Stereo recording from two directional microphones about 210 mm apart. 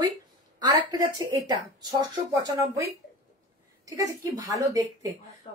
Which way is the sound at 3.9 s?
15° right (ahead or behind).